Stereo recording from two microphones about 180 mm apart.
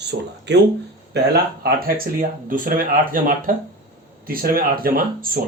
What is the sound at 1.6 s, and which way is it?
Speech, 55° right (ahead or behind).